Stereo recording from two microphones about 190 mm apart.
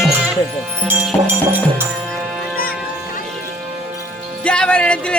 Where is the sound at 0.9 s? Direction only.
10° right (ahead or behind).